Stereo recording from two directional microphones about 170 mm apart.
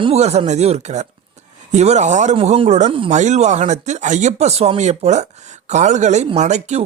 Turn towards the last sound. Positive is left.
turn(degrees=-45)  # may be behind; listen again after turning